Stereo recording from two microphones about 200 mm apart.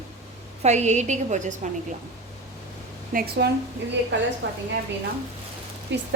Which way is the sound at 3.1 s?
50° right (ahead or behind).